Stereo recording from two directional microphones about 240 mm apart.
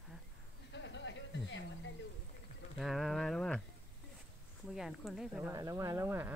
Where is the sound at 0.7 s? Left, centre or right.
Left.